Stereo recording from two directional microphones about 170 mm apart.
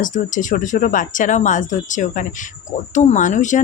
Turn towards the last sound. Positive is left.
turn(degrees=45)  # may be behind; listen again after turning